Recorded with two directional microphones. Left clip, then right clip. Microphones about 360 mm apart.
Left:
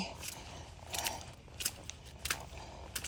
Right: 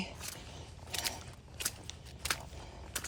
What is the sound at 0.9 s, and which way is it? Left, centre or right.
Mechanisms, centre.